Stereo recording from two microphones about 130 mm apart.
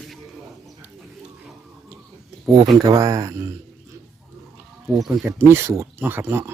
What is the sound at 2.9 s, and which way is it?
Speech, 30° right (ahead or behind).